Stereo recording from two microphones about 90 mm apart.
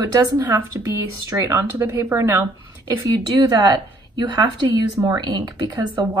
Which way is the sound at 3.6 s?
55° right (ahead or behind).